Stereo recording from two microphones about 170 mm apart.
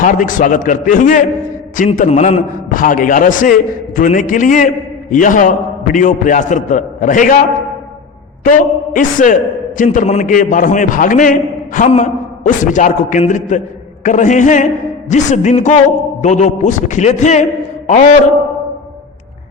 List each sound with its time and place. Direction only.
0.0 s a man's voice: 50° left (ahead or behind)
8.4 s a man's voice: 55° left (ahead or behind)